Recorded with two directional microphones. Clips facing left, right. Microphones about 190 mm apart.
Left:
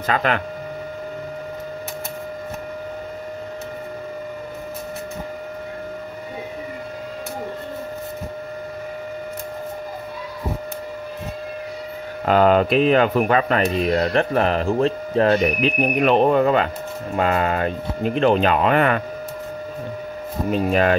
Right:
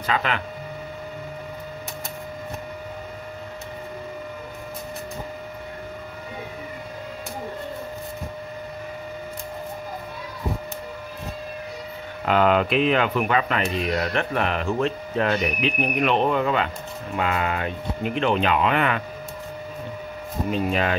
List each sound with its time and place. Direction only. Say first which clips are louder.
0.0 s speech: left 4 dB; 45° left (ahead or behind)
12.3 s speech: left 4 dB; 40° left (ahead or behind)
20.5 s speech: left 5 dB; 45° left (ahead or behind)